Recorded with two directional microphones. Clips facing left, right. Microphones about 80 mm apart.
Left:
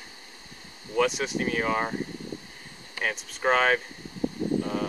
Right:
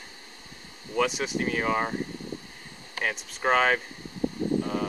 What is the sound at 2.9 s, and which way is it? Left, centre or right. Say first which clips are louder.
Speech: even; centre.